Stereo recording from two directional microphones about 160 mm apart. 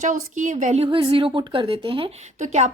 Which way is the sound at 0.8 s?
30° right (ahead or behind).